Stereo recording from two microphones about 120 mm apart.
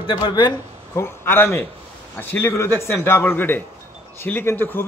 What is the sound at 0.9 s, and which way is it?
A man's voice, 20° left (ahead or behind).